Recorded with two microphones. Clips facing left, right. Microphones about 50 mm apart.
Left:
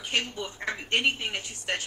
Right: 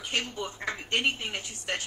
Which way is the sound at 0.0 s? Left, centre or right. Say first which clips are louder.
Left 2 dB; left.